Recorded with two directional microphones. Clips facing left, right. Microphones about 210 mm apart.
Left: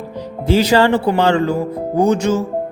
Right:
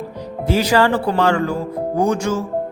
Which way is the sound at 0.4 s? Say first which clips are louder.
Left 3 dB; 25° left (ahead or behind).